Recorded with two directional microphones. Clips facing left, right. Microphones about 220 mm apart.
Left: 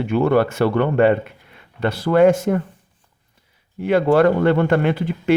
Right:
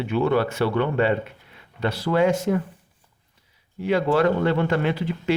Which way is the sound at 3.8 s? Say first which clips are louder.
Left 5 dB; 55° left (ahead or behind).